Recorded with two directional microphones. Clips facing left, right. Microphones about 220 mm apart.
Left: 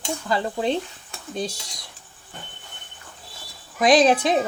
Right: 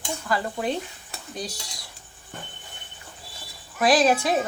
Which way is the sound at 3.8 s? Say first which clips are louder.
Left 3 dB; 20° left (ahead or behind).